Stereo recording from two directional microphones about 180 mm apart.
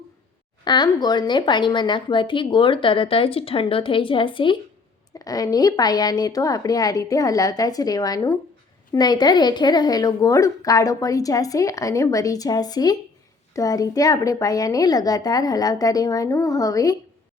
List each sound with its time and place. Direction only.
0.6 s speech: 25° left (ahead or behind)